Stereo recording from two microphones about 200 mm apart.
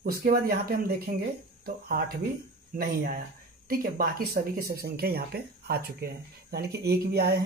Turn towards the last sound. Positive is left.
turn(degrees=-50)  # may be behind; listen again after turning